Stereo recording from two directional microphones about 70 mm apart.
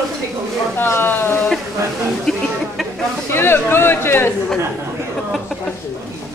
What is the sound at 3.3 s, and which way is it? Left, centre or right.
Speech, left.